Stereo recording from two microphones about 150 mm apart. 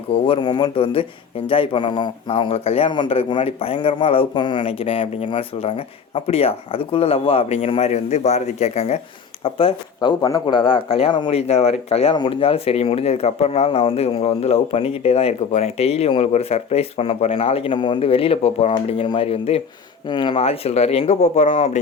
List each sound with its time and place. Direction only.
0.3 s a man's voice: 30° left (ahead or behind)
10.4 s a man's voice: 35° left (ahead or behind)